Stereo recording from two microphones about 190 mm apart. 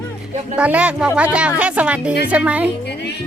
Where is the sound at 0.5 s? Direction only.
5° right (ahead or behind).